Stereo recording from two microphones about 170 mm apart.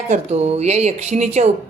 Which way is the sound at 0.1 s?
40° right (ahead or behind).